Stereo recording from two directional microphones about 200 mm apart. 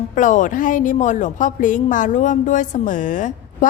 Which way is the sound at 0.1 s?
40° left (ahead or behind).